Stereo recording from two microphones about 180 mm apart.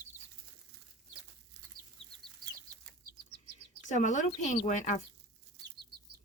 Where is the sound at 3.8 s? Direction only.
45° left (ahead or behind).